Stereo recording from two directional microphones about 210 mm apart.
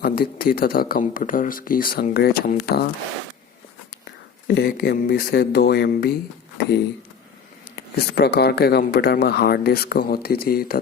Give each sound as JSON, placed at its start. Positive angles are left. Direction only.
{"t": 0.0, "sound": "speech", "side_deg": 45}
{"t": 4.4, "sound": "speech", "side_deg": 50}
{"t": 8.1, "sound": "speech", "side_deg": 50}